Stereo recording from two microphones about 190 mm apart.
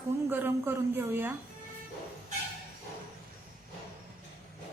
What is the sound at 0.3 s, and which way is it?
A woman's voice, 10° right (ahead or behind).